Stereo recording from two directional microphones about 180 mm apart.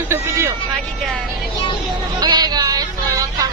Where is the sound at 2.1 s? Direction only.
20° right (ahead or behind).